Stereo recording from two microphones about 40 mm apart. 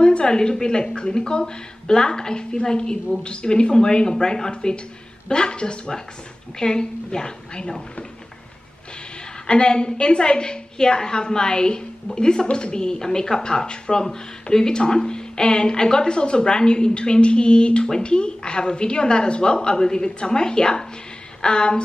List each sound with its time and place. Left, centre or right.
0.0 s a woman's voice: left
9.5 s speech: left